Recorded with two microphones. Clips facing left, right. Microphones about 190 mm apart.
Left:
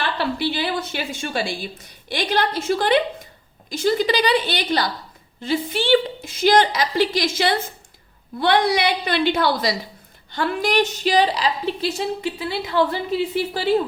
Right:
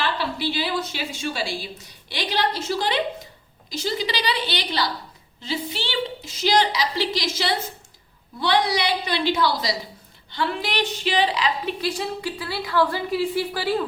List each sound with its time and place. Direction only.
0.0 s a woman's voice: 55° left (ahead or behind); by 13.8 s 25° left (ahead or behind)